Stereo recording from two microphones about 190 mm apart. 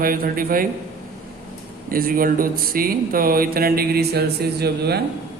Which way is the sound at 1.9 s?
50° right (ahead or behind).